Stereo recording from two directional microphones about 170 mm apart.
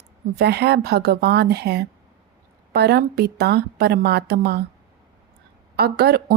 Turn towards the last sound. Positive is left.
turn(degrees=-70)  # may be behind; listen again after turning